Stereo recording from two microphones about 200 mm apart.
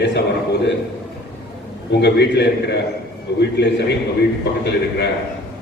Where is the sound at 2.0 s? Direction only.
60° left (ahead or behind).